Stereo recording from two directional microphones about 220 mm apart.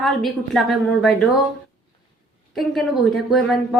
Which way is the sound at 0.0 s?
Centre (ahead or behind).